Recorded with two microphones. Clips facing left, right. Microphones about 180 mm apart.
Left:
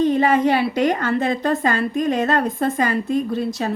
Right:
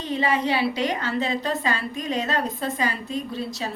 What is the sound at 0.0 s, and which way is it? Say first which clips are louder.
A woman's voice: left 8 dB; 50° left (ahead or behind).